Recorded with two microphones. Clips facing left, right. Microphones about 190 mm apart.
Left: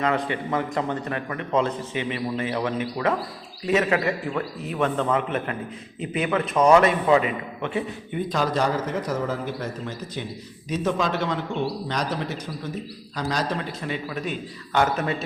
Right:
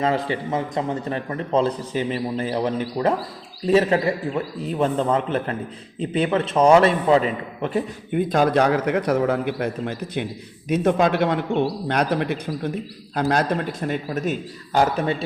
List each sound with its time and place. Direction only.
0.3 s a man's voice: 25° right (ahead or behind)
8.1 s a man's voice: 55° right (ahead or behind); by 15.1 s 35° right (ahead or behind)